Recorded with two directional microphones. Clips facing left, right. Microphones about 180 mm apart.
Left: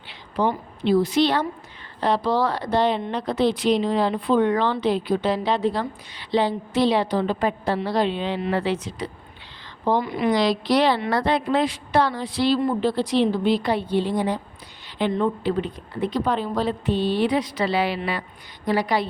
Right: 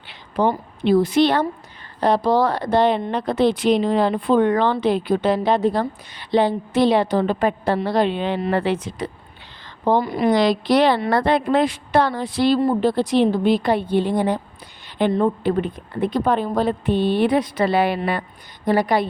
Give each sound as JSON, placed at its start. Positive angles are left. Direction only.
{"t": 0.1, "sound": "a woman's voice", "side_deg": -50}
{"t": 9.8, "sound": "a woman's voice", "side_deg": -45}
{"t": 10.3, "sound": "speech", "side_deg": -50}